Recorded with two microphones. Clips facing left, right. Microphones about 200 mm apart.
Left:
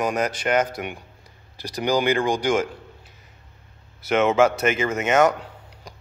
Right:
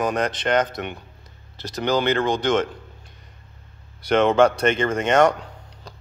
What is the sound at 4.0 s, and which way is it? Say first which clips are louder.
Speech: right 2 dB; 5° left (ahead or behind).